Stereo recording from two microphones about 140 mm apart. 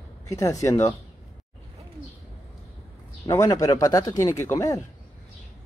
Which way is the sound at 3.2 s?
25° left (ahead or behind).